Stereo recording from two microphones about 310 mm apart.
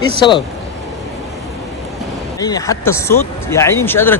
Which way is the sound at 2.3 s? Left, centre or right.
Centre.